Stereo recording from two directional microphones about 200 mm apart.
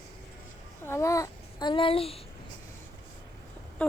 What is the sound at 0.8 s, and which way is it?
A child's voice, 15° left (ahead or behind).